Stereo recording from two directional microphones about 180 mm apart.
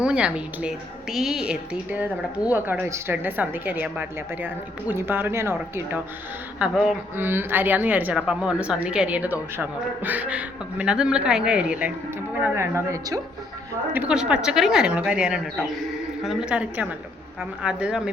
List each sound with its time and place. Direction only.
0.0 s a woman's voice: 5° right (ahead or behind)